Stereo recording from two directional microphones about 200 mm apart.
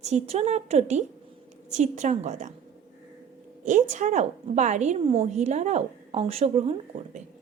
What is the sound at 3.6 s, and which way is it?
Speech, 35° right (ahead or behind).